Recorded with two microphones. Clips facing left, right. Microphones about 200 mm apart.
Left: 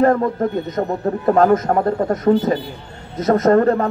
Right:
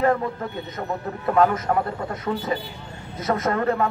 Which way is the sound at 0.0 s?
45° left (ahead or behind).